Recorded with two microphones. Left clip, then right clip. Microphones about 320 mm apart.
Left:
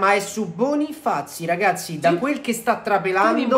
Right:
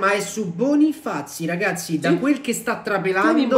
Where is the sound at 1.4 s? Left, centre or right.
Centre.